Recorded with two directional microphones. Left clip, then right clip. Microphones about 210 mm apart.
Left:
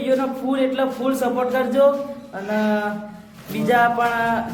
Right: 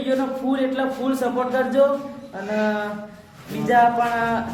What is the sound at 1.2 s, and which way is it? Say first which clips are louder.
Speech: left 1 dB; 5° left (ahead or behind).